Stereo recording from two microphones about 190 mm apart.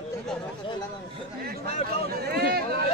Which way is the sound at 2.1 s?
55° right (ahead or behind).